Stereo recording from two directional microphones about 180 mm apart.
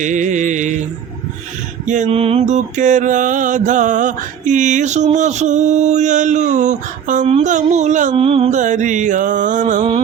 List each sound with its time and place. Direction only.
0.0 s mantra: 45° right (ahead or behind)
1.9 s mantra: 40° right (ahead or behind)